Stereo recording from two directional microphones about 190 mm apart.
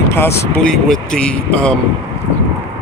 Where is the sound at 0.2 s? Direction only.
15° left (ahead or behind).